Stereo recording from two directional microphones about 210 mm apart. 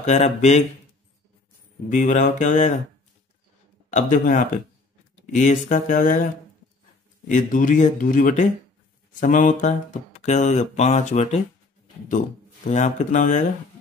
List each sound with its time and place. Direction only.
0.0 s speech: 35° left (ahead or behind)
1.9 s speech: 35° left (ahead or behind)
3.9 s speech: 40° left (ahead or behind)
7.2 s speech: 40° left (ahead or behind)
12.6 s speech: 35° left (ahead or behind)